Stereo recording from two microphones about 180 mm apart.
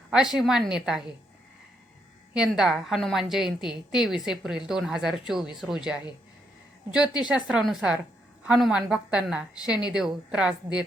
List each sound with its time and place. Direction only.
0.1 s a woman's voice: 5° right (ahead or behind)
2.3 s a woman's voice: 5° right (ahead or behind)
7.3 s a woman's voice: 5° right (ahead or behind)